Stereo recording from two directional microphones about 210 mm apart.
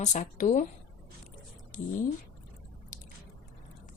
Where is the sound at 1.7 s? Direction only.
35° left (ahead or behind).